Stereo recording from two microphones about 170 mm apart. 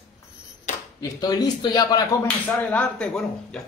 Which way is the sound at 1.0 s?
20° left (ahead or behind).